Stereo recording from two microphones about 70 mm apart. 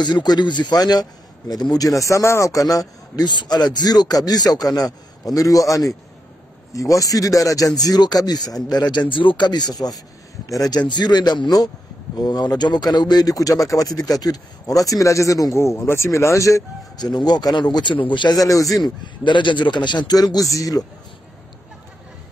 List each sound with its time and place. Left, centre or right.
0.0 s a man's voice: left
8.6 s a man's voice: left
16.9 s speech: left
18.2 s a man's voice: left
19.5 s speech: left